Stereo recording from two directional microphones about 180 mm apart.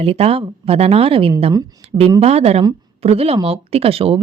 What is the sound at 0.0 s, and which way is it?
A woman's voice, 35° right (ahead or behind).